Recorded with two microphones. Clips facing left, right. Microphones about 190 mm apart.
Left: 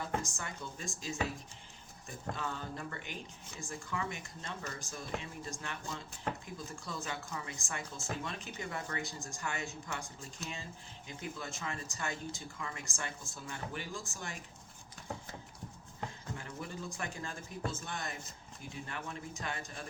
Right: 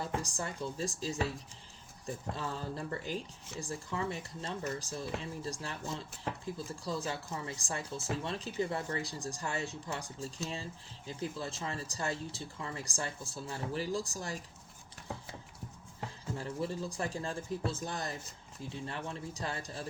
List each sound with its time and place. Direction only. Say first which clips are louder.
0.0 s speech: right 2 dB; 35° right (ahead or behind)
2.3 s speech: even; 30° right (ahead or behind)
16.4 s speech: right 8 dB; 30° right (ahead or behind)